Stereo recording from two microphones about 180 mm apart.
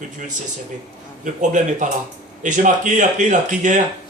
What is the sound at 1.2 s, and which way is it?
A man's voice, 45° right (ahead or behind).